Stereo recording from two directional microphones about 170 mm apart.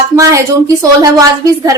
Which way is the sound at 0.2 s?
20° right (ahead or behind).